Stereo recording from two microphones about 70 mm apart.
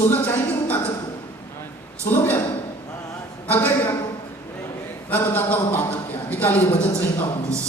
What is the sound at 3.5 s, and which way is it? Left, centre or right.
Speech, left.